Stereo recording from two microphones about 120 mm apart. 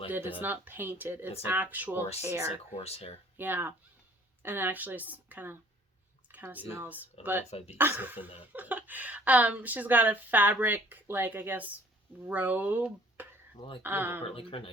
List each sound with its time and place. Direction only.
0.1 s a woman's voice: 15° right (ahead or behind)
2.7 s speech: 60° left (ahead or behind)
3.3 s a woman's voice: 15° right (ahead or behind)
13.6 s speech: 45° left (ahead or behind)
13.8 s a woman's voice: 15° right (ahead or behind)
14.3 s speech: 50° left (ahead or behind)